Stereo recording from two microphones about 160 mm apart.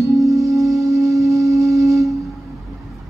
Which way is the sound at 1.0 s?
20° right (ahead or behind).